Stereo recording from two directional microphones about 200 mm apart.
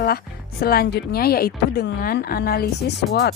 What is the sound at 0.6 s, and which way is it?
Speech, 50° left (ahead or behind).